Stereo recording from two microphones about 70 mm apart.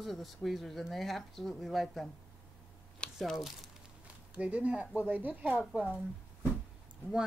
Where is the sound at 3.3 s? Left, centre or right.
Centre.